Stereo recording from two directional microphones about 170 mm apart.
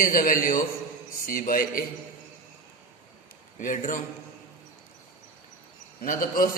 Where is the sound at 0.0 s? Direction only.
55° left (ahead or behind).